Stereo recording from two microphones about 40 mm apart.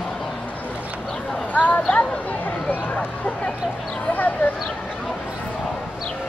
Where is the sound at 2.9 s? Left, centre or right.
Left.